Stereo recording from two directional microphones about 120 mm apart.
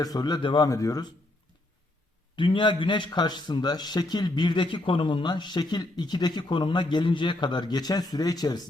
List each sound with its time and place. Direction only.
0.0 s a man's voice: 30° left (ahead or behind)
2.3 s a man's voice: 45° left (ahead or behind)